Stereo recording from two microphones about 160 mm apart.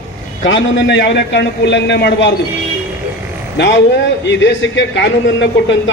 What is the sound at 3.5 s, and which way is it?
A man's voice, 90° left.